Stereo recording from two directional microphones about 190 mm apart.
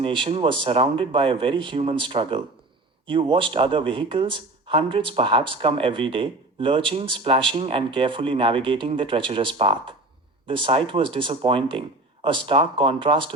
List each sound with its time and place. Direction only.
0.0 s speech: 25° right (ahead or behind)